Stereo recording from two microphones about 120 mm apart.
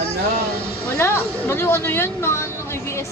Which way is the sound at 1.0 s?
20° left (ahead or behind).